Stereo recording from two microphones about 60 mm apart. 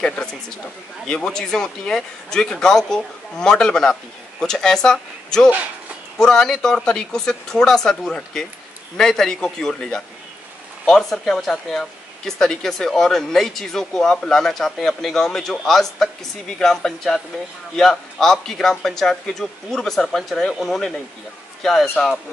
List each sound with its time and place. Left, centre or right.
1.0 s speech: centre